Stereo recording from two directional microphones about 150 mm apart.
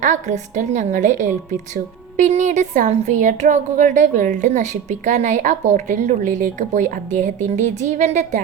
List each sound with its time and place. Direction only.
0.0 s a woman's voice: 55° right (ahead or behind)